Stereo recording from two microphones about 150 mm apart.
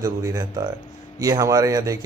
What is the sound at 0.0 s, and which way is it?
A man's voice, 25° right (ahead or behind).